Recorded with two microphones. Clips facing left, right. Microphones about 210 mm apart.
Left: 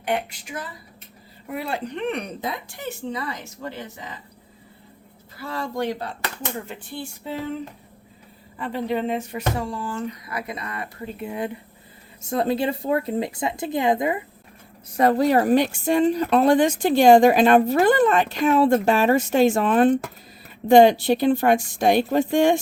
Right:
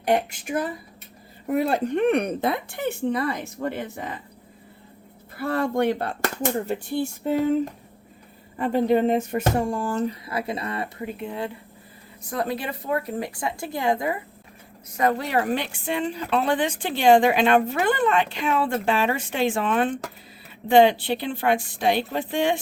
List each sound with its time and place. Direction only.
0.0 s speech: 45° right (ahead or behind)
1.5 s a woman's voice: 45° right (ahead or behind)
5.4 s speech: 55° right (ahead or behind); by 10.8 s 30° right (ahead or behind)
11.2 s speech: 15° left (ahead or behind)
12.2 s speech: 25° left (ahead or behind)
14.9 s a woman's voice: 35° left (ahead or behind)